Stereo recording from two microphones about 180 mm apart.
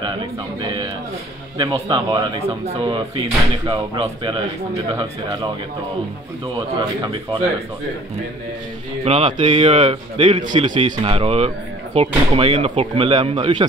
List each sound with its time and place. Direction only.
0.0 s speech: 25° right (ahead or behind)
9.0 s speech: 30° right (ahead or behind)
10.5 s speech: 25° right (ahead or behind)